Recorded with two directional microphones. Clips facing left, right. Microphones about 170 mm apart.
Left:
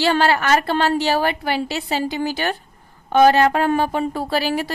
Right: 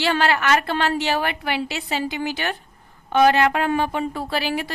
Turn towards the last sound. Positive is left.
turn(degrees=40)  # may be behind; listen again after turning